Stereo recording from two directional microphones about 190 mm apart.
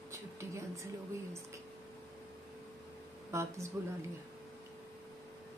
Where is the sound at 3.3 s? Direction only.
15° right (ahead or behind).